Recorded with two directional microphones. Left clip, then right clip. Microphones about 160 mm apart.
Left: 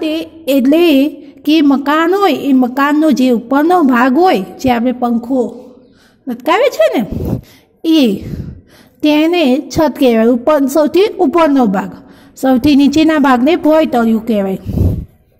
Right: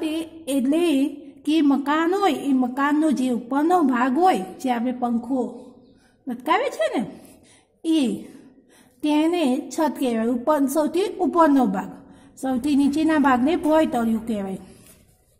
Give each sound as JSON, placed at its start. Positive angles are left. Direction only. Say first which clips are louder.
{"t": 0.0, "sound": "a woman's voice", "louder": "left 10 dB", "side_deg": 15}